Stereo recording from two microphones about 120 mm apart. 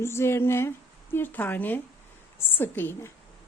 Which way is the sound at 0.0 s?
20° left (ahead or behind).